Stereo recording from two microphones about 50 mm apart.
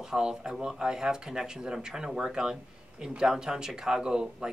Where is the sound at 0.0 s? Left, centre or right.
Centre.